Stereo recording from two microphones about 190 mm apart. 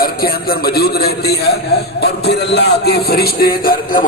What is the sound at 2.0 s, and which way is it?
A man's voice, 60° left (ahead or behind).